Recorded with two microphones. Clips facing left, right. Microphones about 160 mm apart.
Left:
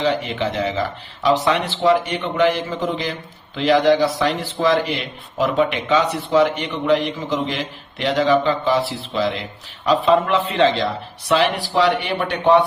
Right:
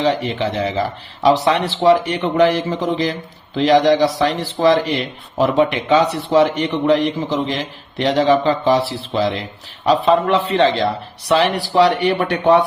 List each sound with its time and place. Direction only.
0.0 s speech: 35° right (ahead or behind)